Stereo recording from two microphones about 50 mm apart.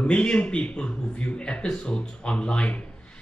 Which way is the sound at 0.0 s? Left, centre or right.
Left.